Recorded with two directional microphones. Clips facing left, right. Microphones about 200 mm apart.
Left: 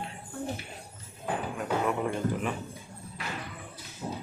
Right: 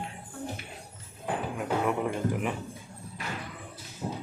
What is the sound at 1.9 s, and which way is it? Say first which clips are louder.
Music: right 1 dB; 10° right (ahead or behind).